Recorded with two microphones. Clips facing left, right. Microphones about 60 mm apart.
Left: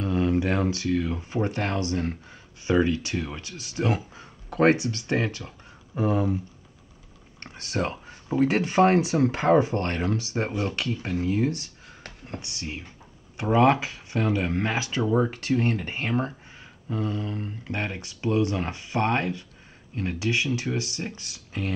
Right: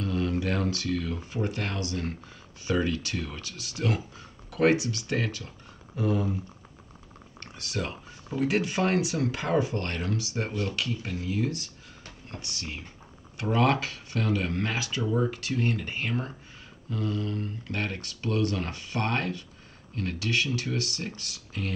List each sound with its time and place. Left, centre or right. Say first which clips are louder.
0.0 s speech: left 4 dB; left
1.3 s speech: left 5 dB; left
7.3 s computer keyboard: left 5 dB; left
8.3 s speech: left 4 dB; left